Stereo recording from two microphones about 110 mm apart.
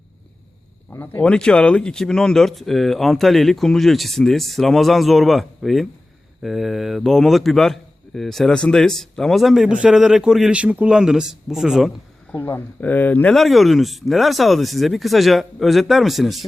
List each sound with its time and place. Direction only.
0.9 s a man's voice: 15° left (ahead or behind); by 11.9 s 5° right (ahead or behind)
12.3 s speech: 15° left (ahead or behind)
13.3 s a man's voice: centre (ahead or behind)